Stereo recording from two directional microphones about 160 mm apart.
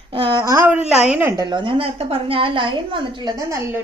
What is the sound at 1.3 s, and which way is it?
A woman's voice, 25° right (ahead or behind).